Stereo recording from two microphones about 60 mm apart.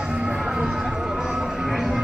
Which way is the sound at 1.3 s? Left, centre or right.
Centre.